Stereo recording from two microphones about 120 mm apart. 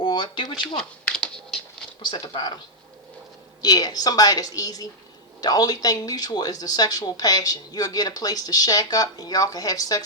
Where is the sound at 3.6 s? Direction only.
35° left (ahead or behind).